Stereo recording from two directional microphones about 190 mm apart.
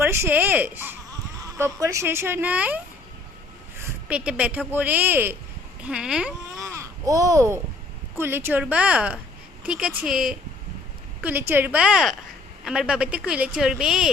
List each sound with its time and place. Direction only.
0.0 s a woman's voice: 10° right (ahead or behind)
6.7 s a sound: 15° right (ahead or behind)
8.1 s a woman's voice: 10° right (ahead or behind)